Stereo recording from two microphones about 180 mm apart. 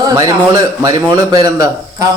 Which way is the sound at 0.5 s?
20° right (ahead or behind).